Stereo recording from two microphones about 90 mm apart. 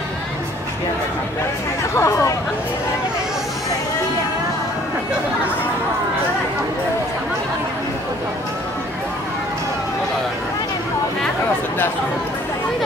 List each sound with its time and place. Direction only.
2.0 s speech: 35° left (ahead or behind)